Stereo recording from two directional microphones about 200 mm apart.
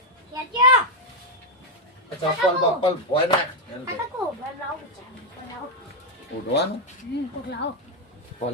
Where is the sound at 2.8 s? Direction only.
30° left (ahead or behind).